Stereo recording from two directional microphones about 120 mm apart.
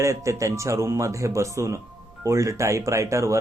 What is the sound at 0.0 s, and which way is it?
A man's voice, 25° right (ahead or behind).